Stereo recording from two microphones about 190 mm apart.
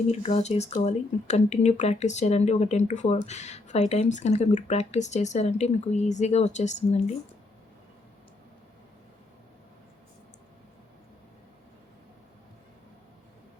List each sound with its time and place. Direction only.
0.1 s speech: 35° left (ahead or behind)